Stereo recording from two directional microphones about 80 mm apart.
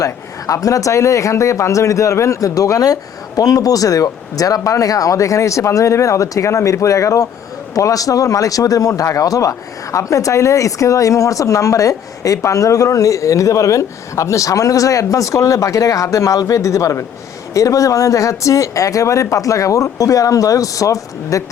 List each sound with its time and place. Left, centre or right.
0.0 s speech: left